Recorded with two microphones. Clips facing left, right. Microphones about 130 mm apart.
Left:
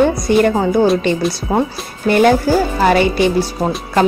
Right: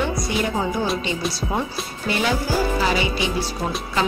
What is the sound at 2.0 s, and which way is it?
Speech, 55° left (ahead or behind).